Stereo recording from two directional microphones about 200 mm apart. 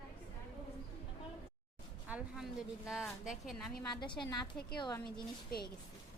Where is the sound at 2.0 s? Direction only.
5° right (ahead or behind).